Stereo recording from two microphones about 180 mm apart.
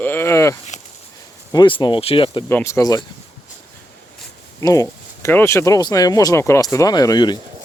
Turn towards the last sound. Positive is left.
turn(degrees=25)  # may be behind; listen again after turning